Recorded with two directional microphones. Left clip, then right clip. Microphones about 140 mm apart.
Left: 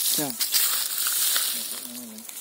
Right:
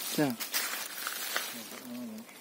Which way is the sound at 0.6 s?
35° left (ahead or behind).